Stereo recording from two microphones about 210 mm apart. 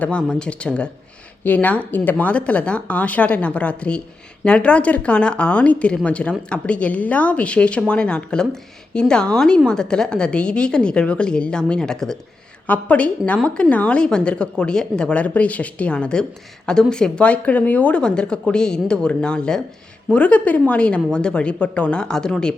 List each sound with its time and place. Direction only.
0.0 s a woman's voice: 5° left (ahead or behind)